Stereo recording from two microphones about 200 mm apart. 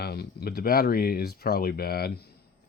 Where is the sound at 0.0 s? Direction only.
50° left (ahead or behind).